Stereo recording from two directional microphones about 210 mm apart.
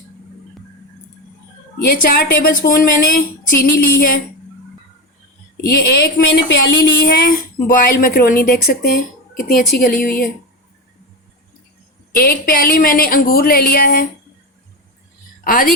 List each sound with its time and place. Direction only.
1.8 s a woman's voice: 50° left (ahead or behind)
5.6 s a woman's voice: 50° left (ahead or behind)
12.1 s a woman's voice: 45° left (ahead or behind)
15.4 s a woman's voice: 40° left (ahead or behind)